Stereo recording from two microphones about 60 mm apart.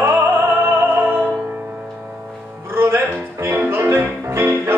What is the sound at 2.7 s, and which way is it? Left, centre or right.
Music, right.